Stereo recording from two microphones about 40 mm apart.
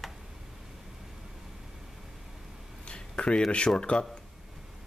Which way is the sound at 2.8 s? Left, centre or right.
Left.